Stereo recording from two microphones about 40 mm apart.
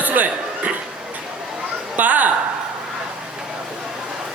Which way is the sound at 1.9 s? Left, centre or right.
Right.